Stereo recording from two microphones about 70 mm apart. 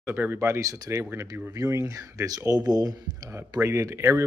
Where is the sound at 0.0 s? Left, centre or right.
Right.